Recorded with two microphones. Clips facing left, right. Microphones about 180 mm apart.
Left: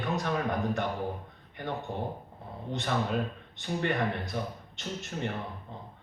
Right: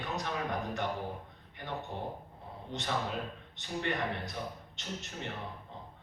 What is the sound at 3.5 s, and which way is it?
Speech, 50° left (ahead or behind).